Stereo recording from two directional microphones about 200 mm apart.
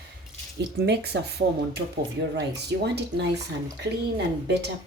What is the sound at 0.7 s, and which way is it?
A woman's voice, 55° right (ahead or behind).